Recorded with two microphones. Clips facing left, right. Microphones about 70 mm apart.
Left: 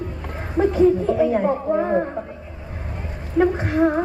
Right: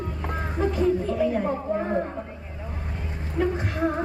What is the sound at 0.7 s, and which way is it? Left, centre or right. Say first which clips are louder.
Speech: left 7 dB; left.